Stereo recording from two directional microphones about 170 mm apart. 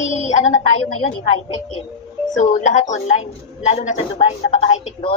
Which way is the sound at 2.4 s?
45° left (ahead or behind).